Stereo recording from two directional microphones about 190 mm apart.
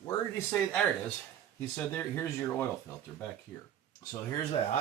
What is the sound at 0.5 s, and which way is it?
Speech, 5° left (ahead or behind).